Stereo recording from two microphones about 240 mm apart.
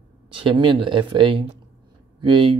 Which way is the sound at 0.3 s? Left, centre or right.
Right.